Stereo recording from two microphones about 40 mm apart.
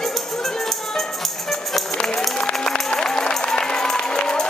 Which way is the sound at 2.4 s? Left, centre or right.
Centre.